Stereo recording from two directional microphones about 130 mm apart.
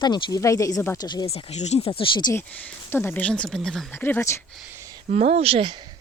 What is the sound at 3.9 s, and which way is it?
Speech, 15° left (ahead or behind).